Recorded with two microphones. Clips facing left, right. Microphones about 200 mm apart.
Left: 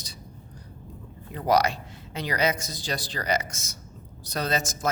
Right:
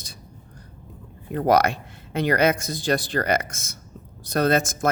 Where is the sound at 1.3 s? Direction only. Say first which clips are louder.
Right 4 dB; 55° right (ahead or behind).